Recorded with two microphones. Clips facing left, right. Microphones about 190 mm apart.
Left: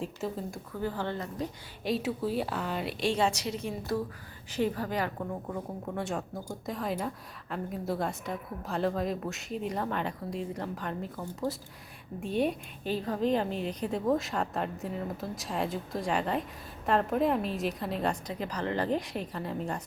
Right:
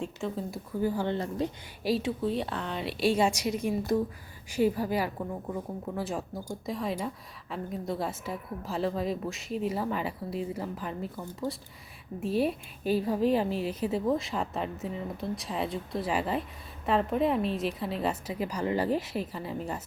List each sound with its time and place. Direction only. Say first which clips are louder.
0.0 s a woman's voice: right 1 dB; centre (ahead or behind)
0.8 s a woman's voice: right 4 dB; 10° right (ahead or behind)
1.1 s a woman's voice: right 5 dB; 25° right (ahead or behind)
1.8 s a woman's voice: right 2 dB; centre (ahead or behind)
3.0 s a woman's voice: right 4 dB; 10° right (ahead or behind)